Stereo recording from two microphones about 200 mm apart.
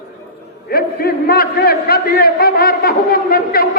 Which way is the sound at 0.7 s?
50° left (ahead or behind).